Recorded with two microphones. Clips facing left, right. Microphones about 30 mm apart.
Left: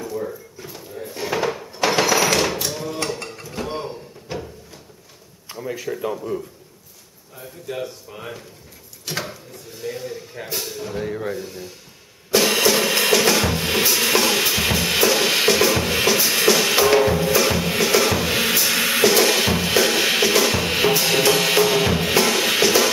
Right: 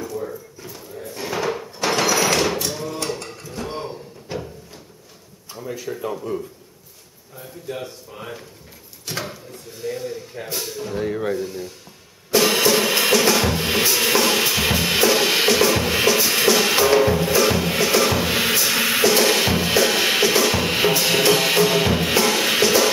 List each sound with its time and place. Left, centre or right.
0.0 s a sound: centre
1.9 s cattle: centre
3.3 s mechanisms: centre
3.6 s a sound: centre
5.5 s a man's voice: centre
9.0 s mechanisms: centre
9.8 s speech: centre
12.3 s drum: centre